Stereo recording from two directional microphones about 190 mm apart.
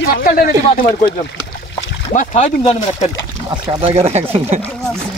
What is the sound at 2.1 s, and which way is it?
Speech, 35° left (ahead or behind).